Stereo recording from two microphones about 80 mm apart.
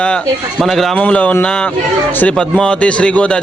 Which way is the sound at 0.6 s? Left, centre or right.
Centre.